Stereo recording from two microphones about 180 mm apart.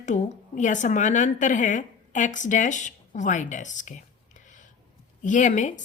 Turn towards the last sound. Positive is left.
turn(degrees=45)  # may be behind; listen again after turning